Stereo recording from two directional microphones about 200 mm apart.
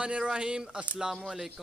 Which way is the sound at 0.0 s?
5° right (ahead or behind).